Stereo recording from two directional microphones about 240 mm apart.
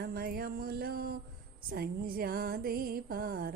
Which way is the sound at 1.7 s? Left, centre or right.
Right.